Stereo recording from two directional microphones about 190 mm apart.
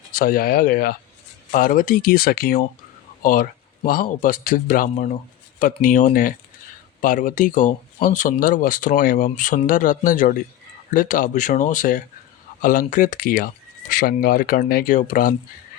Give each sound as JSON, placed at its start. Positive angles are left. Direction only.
{"t": 0.1, "sound": "speech", "side_deg": 50}